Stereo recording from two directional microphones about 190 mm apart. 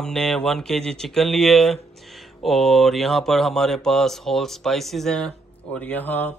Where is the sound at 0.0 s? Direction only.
5° left (ahead or behind).